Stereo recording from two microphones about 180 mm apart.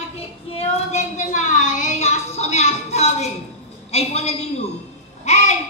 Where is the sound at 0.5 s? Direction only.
35° left (ahead or behind).